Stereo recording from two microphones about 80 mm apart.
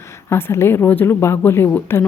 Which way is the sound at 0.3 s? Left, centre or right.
Left.